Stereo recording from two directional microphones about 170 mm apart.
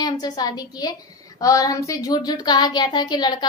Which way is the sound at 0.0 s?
25° left (ahead or behind).